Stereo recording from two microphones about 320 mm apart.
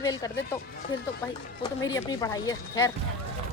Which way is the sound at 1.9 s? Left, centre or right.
Centre.